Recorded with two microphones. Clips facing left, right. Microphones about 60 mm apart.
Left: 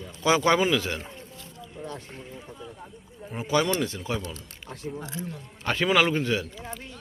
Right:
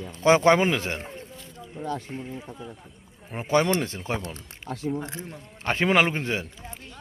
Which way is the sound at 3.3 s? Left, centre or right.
Right.